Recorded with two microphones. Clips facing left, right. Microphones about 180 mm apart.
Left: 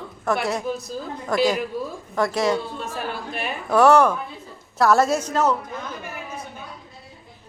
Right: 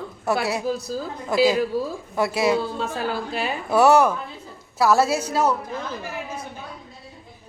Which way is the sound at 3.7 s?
10° right (ahead or behind).